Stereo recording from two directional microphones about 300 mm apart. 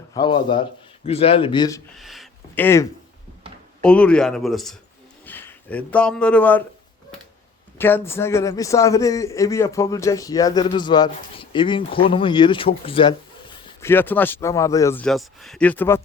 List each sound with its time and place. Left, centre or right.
0.1 s a man's voice: centre
2.0 s speech: centre
3.8 s speech: centre
7.8 s a man's voice: centre